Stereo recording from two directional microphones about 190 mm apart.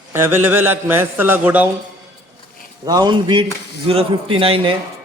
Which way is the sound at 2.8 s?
20° right (ahead or behind).